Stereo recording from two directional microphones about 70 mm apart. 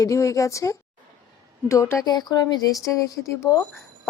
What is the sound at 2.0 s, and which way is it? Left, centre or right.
Speech, left.